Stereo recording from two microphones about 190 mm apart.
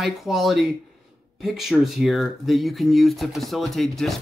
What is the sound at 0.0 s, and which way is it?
Speech, centre (ahead or behind).